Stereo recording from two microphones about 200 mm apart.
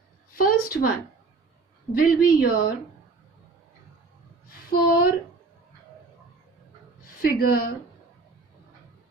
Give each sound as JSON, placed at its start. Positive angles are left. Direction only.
{"t": 0.3, "sound": "a sound", "side_deg": 45}
{"t": 1.9, "sound": "a man's voice", "side_deg": 45}
{"t": 4.7, "sound": "a man's voice", "side_deg": 50}
{"t": 7.2, "sound": "a man's voice", "side_deg": 50}